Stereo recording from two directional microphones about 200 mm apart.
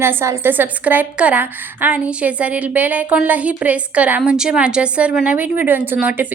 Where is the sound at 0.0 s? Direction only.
10° right (ahead or behind).